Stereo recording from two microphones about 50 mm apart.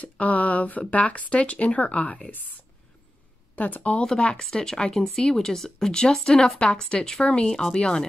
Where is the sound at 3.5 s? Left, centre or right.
Left.